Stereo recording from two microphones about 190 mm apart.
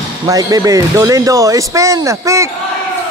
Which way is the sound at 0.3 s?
20° right (ahead or behind).